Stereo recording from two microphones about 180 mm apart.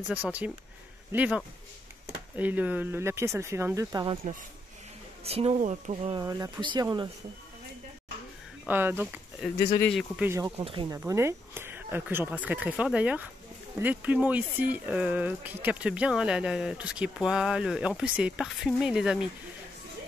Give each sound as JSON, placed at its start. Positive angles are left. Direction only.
{"t": 0.1, "sound": "speech", "side_deg": -10}
{"t": 6.2, "sound": "speech", "side_deg": -20}
{"t": 8.6, "sound": "speech", "side_deg": -10}
{"t": 9.8, "sound": "speech", "side_deg": 0}
{"t": 10.2, "sound": "speech", "side_deg": -15}
{"t": 10.6, "sound": "speech", "side_deg": -30}
{"t": 10.9, "sound": "speech", "side_deg": -15}